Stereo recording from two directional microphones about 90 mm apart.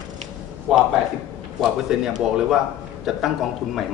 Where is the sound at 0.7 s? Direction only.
5° right (ahead or behind).